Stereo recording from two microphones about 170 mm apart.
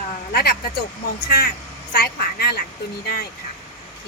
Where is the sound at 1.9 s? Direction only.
65° left (ahead or behind).